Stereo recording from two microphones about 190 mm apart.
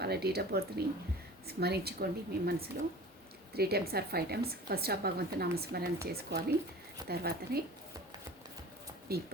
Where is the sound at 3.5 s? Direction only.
55° right (ahead or behind).